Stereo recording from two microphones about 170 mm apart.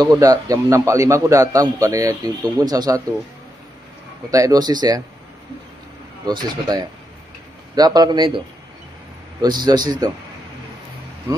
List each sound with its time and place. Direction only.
0.0 s a man's voice: 20° right (ahead or behind)
4.3 s a man's voice: 20° right (ahead or behind)
6.2 s a man's voice: 25° right (ahead or behind)
9.4 s a man's voice: 25° right (ahead or behind)